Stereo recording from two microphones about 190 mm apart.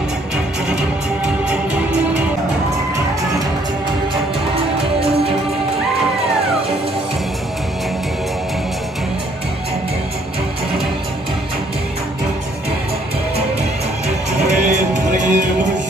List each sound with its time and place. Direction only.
1.2 s music: 5° right (ahead or behind)
14.0 s music: 40° right (ahead or behind)